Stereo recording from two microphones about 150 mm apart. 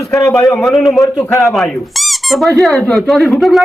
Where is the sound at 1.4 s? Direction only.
Centre (ahead or behind).